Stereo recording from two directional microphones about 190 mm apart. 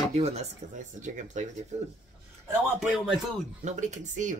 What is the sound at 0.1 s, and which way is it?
Speech, 35° right (ahead or behind).